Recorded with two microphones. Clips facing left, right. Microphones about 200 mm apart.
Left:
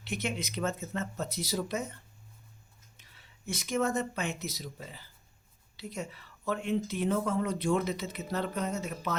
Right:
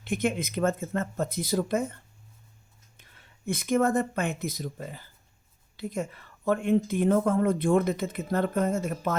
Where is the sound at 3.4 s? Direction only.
55° right (ahead or behind).